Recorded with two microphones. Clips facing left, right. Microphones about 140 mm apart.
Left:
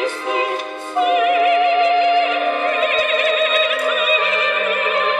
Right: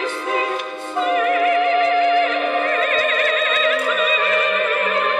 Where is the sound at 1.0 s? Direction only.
15° left (ahead or behind).